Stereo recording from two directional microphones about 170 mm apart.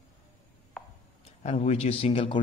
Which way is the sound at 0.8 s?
Centre (ahead or behind).